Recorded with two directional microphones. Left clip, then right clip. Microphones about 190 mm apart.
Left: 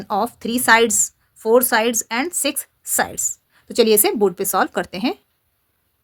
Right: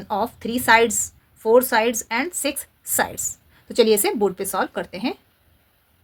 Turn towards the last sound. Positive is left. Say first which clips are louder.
# left 4 dB
turn(degrees=40)  # may be behind; listen again after turning